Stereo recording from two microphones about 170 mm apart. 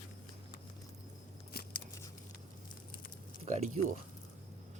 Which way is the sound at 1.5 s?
65° left (ahead or behind).